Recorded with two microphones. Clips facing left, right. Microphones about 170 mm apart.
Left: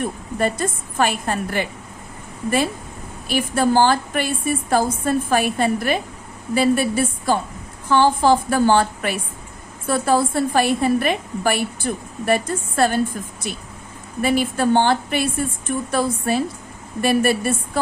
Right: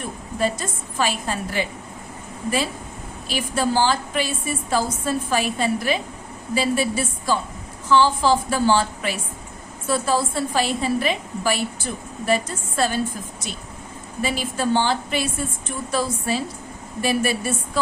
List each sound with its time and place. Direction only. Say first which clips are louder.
0.3 s a woman's voice: left 2 dB; 55° left (ahead or behind)
3.2 s a woman's voice: left 4 dB; 55° left (ahead or behind)
14.2 s a woman's voice: left 6 dB; 55° left (ahead or behind)